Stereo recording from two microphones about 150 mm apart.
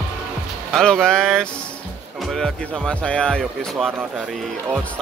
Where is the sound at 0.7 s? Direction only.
5° left (ahead or behind).